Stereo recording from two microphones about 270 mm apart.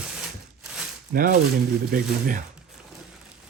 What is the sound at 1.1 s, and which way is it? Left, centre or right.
Speech, right.